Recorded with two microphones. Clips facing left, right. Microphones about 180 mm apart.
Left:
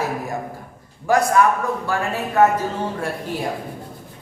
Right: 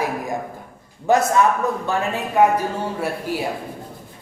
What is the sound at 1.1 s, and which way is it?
A woman's voice, 25° right (ahead or behind).